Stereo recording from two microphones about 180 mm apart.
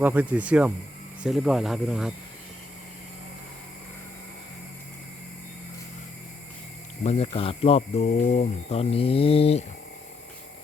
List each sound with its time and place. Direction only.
0.0 s speech: 10° right (ahead or behind)
7.0 s speech: 35° left (ahead or behind)